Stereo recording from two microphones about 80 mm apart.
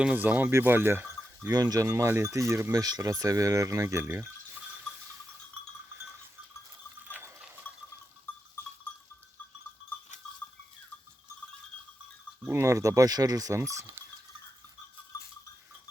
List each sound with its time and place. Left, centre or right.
0.0 s speech: centre
1.5 s speech: right
2.8 s speech: right
7.0 s fill: right
7.6 s sheep: centre
12.5 s speech: right